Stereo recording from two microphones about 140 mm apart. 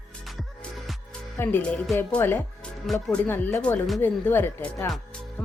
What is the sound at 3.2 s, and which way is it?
Speech, 15° left (ahead or behind).